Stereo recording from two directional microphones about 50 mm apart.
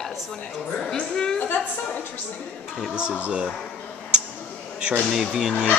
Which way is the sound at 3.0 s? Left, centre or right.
Right.